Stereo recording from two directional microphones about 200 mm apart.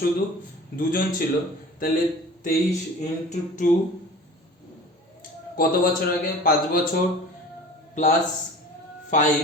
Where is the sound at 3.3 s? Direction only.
40° left (ahead or behind).